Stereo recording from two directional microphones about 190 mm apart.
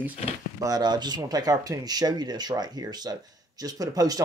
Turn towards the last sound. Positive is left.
turn(degrees=-20)  # may be behind; listen again after turning